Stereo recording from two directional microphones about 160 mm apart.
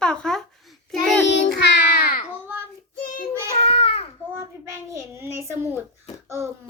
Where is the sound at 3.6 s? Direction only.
40° left (ahead or behind).